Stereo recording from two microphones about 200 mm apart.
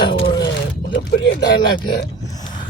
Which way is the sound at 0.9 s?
65° left (ahead or behind).